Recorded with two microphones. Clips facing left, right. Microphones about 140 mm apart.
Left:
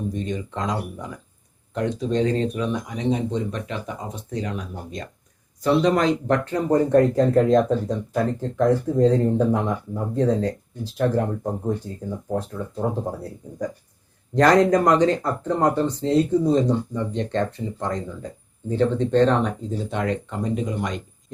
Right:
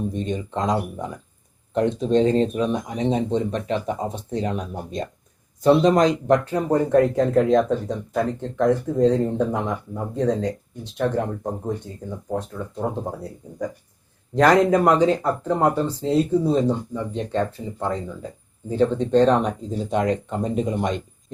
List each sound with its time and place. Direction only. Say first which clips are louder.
0.1 s speech: right 2 dB; 25° right (ahead or behind)